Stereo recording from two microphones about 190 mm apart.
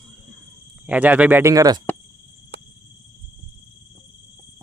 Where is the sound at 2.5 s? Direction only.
60° right (ahead or behind).